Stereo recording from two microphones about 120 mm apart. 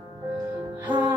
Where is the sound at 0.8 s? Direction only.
15° right (ahead or behind).